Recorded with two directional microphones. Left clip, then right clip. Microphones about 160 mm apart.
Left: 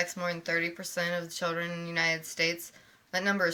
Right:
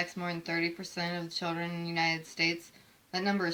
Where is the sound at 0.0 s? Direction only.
20° left (ahead or behind).